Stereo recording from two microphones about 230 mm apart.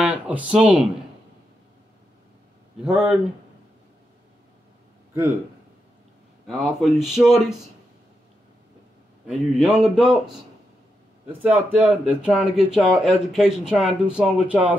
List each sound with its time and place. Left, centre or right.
0.0 s speech: centre
2.8 s speech: centre
6.4 s speech: centre
9.6 s speech: centre
11.4 s speech: centre